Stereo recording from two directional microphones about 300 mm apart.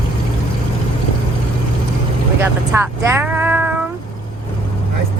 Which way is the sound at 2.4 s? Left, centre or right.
Centre.